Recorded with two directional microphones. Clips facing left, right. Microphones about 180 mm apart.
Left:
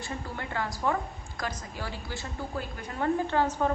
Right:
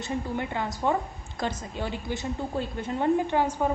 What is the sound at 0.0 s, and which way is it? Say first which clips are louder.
A woman's voice: right 7 dB; 20° right (ahead or behind).